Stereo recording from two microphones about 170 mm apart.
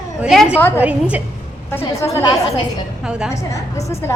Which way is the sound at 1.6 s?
15° left (ahead or behind).